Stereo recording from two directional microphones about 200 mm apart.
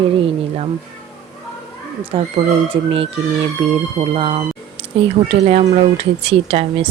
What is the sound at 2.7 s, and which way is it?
Speech, 30° right (ahead or behind).